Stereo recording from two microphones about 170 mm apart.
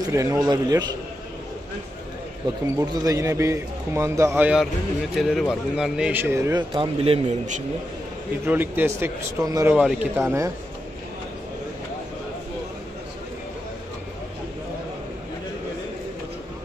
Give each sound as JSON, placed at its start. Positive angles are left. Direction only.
{"t": 0.0, "sound": "a man's voice", "side_deg": -15}
{"t": 2.8, "sound": "a man's voice", "side_deg": -20}
{"t": 8.5, "sound": "a man's voice", "side_deg": -10}
{"t": 9.8, "sound": "a man's voice", "side_deg": -5}
{"t": 10.2, "sound": "a man's voice", "side_deg": -15}